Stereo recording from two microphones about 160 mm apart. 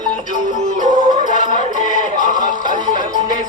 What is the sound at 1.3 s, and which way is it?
Music, 50° left (ahead or behind).